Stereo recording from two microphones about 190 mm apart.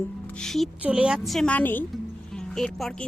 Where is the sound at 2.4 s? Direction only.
Centre (ahead or behind).